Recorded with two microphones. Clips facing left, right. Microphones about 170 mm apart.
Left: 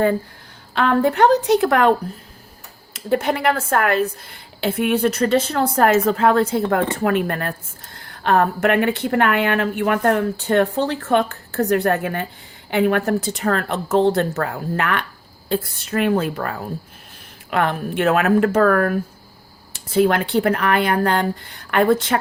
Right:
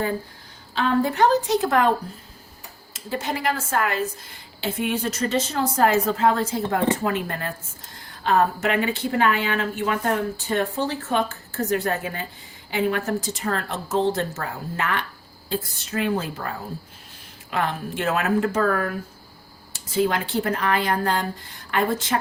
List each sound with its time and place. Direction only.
0.7 s a woman's voice: 60° left (ahead or behind)
2.9 s a woman's voice: 60° left (ahead or behind)